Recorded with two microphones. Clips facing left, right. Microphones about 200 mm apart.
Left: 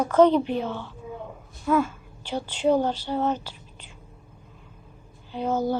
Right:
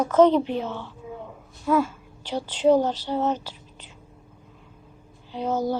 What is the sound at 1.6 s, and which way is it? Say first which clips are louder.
Speech: right 1 dB; 10° right (ahead or behind).